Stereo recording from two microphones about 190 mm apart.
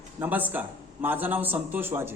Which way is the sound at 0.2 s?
10° right (ahead or behind).